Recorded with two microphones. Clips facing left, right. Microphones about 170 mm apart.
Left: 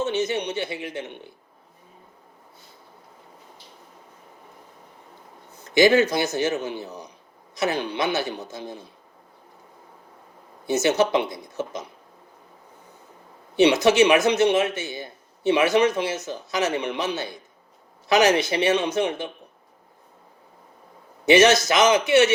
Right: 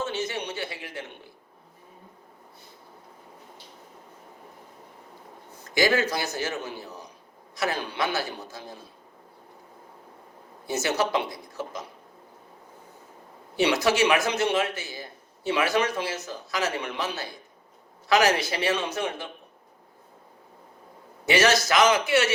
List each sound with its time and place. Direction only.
0.0 s a man's voice: 20° left (ahead or behind)
5.7 s a man's voice: 20° left (ahead or behind)
10.7 s a man's voice: 20° left (ahead or behind)
13.6 s a man's voice: 20° left (ahead or behind)
21.2 s a man's voice: 20° left (ahead or behind)